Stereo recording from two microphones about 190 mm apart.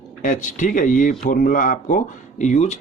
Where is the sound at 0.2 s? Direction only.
40° left (ahead or behind).